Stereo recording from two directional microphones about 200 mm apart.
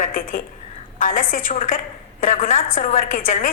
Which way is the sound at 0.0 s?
45° left (ahead or behind).